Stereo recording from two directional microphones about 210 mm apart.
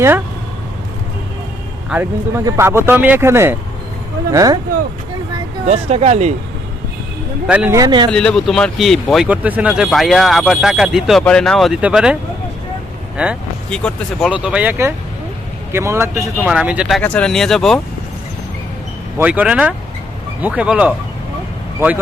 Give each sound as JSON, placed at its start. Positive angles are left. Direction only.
{"t": 1.9, "sound": "speech", "side_deg": -10}
{"t": 5.6, "sound": "speech", "side_deg": -30}
{"t": 7.4, "sound": "speech", "side_deg": -5}
{"t": 7.8, "sound": "speech", "side_deg": -20}
{"t": 8.1, "sound": "speech", "side_deg": 5}
{"t": 13.1, "sound": "speech", "side_deg": 0}
{"t": 19.2, "sound": "speech", "side_deg": -5}